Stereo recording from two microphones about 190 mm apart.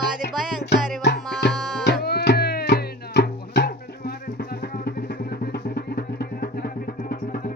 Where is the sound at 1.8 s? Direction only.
60° left (ahead or behind).